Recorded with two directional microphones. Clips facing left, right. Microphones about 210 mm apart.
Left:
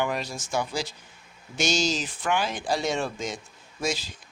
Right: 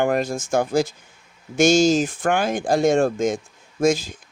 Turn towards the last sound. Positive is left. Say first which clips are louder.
# right 11 dB
turn(degrees=-50)  # may be behind; listen again after turning